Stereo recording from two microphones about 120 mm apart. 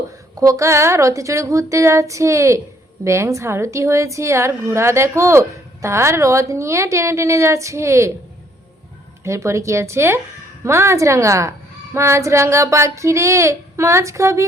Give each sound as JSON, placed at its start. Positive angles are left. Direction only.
{"t": 0.3, "sound": "a woman's voice", "side_deg": -25}
{"t": 9.2, "sound": "a woman's voice", "side_deg": -25}